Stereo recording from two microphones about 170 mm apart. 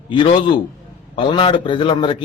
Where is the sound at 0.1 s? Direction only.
30° left (ahead or behind).